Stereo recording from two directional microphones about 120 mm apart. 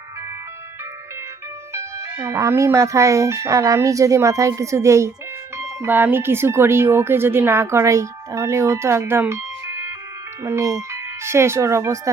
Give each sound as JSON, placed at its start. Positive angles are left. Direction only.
{"t": 1.7, "sound": "speech", "side_deg": -25}